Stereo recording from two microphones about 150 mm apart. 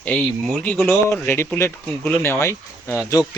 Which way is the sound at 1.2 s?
15° left (ahead or behind).